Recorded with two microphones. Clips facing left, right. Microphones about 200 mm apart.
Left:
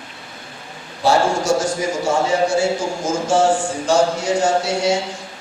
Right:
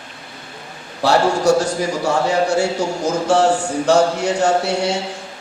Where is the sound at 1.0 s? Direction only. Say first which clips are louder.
Right 2 dB; 65° right (ahead or behind).